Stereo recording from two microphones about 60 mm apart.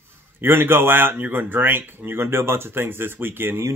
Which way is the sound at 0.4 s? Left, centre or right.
Right.